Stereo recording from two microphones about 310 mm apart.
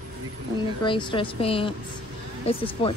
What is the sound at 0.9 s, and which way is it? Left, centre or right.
A woman's voice, centre.